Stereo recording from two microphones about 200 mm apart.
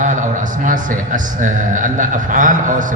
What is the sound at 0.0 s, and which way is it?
A man's voice, 40° right (ahead or behind).